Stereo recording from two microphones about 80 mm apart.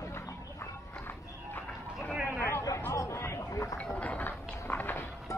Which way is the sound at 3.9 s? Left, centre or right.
Centre.